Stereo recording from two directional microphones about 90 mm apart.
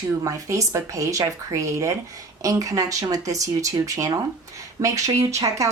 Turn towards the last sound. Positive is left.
turn(degrees=-40)  # may be behind; listen again after turning